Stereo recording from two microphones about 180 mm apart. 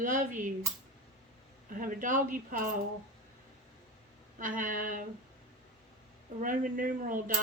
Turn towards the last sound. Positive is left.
turn(degrees=-50)  # may be behind; listen again after turning